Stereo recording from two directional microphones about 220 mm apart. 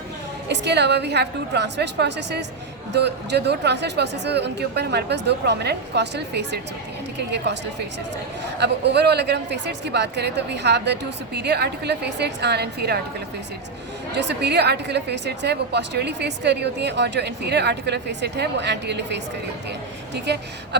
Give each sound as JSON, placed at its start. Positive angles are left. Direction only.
{"t": 0.4, "sound": "a woman's voice", "side_deg": -50}
{"t": 8.5, "sound": "a woman's voice", "side_deg": -50}
{"t": 14.2, "sound": "a woman's voice", "side_deg": -50}